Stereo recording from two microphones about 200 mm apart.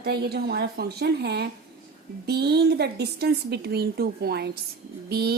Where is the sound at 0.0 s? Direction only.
50° right (ahead or behind).